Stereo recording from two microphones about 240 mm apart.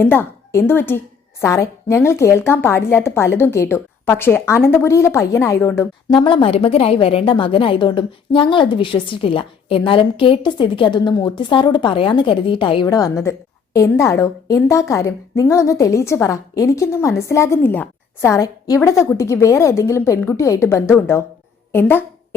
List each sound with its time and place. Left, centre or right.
0.0 s a woman's voice: centre